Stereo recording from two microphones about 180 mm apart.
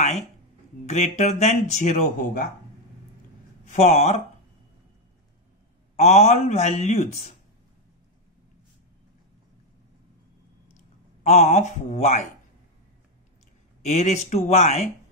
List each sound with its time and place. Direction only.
0.8 s speech: 40° left (ahead or behind)
3.6 s speech: 40° left (ahead or behind)
5.9 s speech: 35° left (ahead or behind)
11.2 s speech: 40° left (ahead or behind)
13.8 s speech: 35° left (ahead or behind)